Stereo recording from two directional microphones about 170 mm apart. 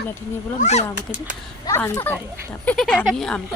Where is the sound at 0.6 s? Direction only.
40° left (ahead or behind).